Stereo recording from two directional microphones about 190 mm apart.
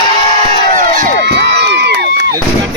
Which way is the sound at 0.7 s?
45° right (ahead or behind).